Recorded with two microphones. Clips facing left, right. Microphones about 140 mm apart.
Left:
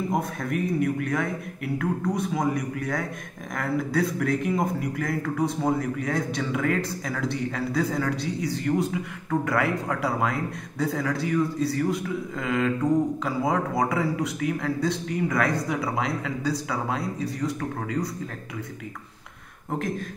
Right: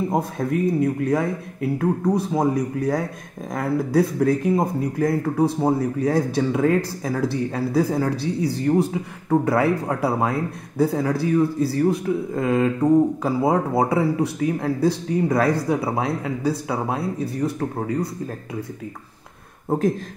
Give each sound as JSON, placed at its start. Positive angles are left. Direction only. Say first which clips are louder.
{"t": 0.1, "sound": "speech", "louder": "right 4 dB", "side_deg": -30}